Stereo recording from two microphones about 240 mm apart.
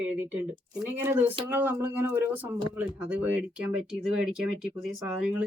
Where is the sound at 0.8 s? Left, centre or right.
Centre.